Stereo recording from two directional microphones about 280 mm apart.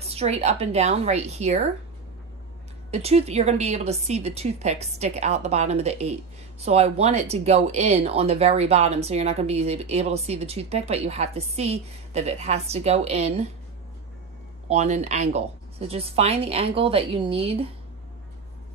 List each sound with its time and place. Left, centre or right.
0.0 s speech: right
2.9 s speech: right
14.7 s speech: right